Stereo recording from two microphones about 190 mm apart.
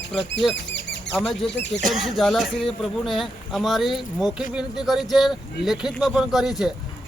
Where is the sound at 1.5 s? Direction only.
65° left (ahead or behind).